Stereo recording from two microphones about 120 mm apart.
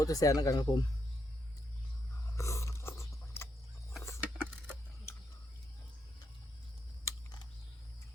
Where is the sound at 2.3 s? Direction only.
25° left (ahead or behind).